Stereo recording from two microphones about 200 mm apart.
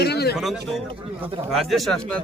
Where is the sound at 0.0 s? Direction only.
55° left (ahead or behind).